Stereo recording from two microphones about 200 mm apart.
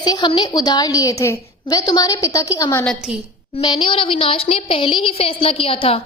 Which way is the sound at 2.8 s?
Centre (ahead or behind).